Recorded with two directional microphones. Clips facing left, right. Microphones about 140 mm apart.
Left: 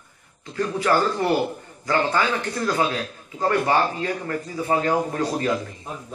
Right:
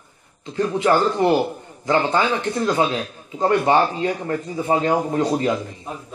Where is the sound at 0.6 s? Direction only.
20° right (ahead or behind).